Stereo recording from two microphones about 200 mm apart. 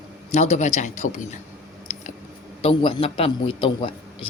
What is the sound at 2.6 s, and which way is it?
Speech, 25° left (ahead or behind).